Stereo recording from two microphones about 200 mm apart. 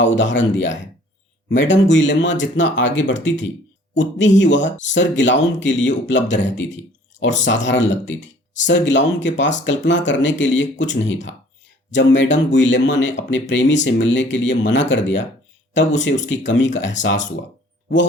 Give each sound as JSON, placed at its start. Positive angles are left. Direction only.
{"t": 0.0, "sound": "speech", "side_deg": 65}